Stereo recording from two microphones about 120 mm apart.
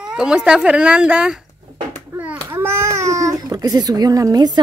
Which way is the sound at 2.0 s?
15° right (ahead or behind).